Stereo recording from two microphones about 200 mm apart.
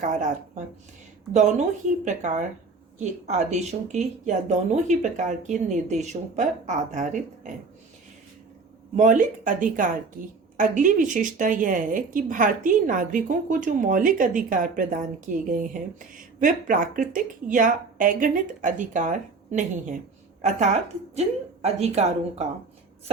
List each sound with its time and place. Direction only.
0.0 s a woman's voice: 40° right (ahead or behind)
9.0 s a woman's voice: 40° right (ahead or behind)